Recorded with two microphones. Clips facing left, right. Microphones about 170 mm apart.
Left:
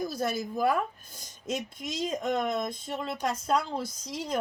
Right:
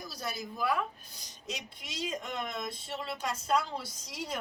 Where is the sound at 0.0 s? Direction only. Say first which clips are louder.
Left 9 dB; 50° left (ahead or behind).